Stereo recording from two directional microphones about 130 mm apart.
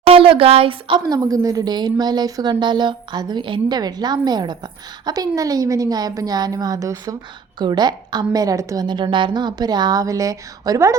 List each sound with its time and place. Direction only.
0.0 s a woman's voice: 45° right (ahead or behind); by 10.9 s 25° right (ahead or behind)